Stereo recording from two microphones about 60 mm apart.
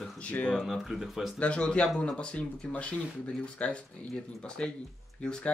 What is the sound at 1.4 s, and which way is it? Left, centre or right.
A man's voice, centre.